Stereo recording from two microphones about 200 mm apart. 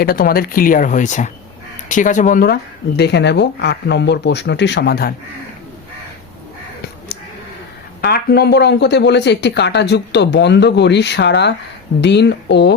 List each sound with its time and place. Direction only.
0.0 s speech: 50° left (ahead or behind)
8.0 s speech: 55° left (ahead or behind)